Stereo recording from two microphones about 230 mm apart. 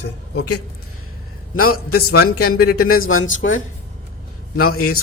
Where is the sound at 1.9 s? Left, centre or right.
Left.